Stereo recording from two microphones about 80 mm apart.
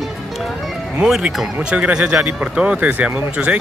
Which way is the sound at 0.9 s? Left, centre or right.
Centre.